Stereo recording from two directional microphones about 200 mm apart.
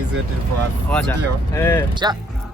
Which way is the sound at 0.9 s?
10° left (ahead or behind).